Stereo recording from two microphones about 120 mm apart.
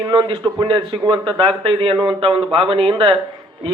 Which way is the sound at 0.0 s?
40° right (ahead or behind).